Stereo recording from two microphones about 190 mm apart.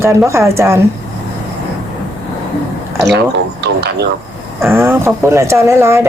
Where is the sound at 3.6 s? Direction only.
60° right (ahead or behind).